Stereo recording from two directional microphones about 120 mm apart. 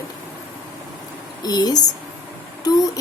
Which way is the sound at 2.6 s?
30° left (ahead or behind).